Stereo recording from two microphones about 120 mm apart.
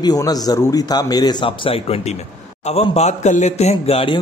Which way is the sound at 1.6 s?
55° left (ahead or behind).